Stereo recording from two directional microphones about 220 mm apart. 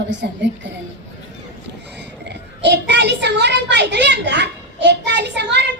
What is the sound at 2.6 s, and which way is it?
A child's voice, 50° right (ahead or behind).